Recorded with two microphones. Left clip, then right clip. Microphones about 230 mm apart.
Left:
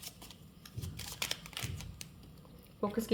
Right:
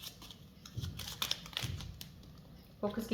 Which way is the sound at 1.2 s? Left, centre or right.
Left.